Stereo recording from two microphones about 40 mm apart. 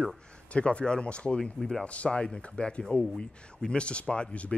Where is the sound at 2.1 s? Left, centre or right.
Centre.